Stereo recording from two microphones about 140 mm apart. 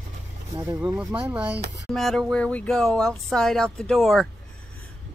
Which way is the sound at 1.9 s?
Centre (ahead or behind).